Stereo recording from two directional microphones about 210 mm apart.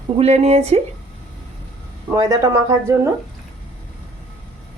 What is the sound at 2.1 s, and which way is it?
Speech, 15° right (ahead or behind).